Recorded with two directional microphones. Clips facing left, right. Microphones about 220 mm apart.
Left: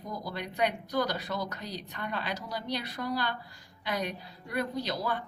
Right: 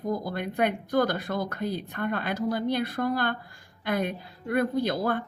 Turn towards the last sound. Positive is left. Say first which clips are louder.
# right 7 dB
turn(degrees=-55)  # may be behind; listen again after turning